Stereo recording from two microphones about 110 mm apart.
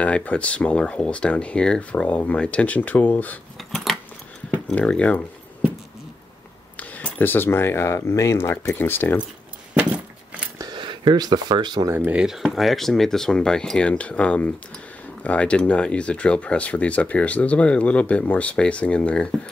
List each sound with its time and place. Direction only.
0.0 s speech: 10° left (ahead or behind)
3.5 s biting: centre (ahead or behind)
4.6 s speech: 10° left (ahead or behind)
6.8 s speech: 15° left (ahead or behind)
10.6 s speech: 45° right (ahead or behind)
11.9 s speech: 20° right (ahead or behind)
12.2 s speech: 5° right (ahead or behind)